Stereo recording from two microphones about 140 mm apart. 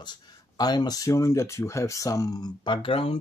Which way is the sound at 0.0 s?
30° left (ahead or behind).